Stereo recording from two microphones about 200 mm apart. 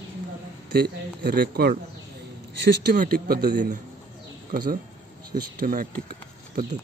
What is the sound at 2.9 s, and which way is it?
Speech, 45° right (ahead or behind).